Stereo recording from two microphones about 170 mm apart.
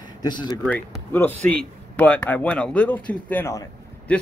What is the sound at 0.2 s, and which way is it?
Speech, 25° left (ahead or behind).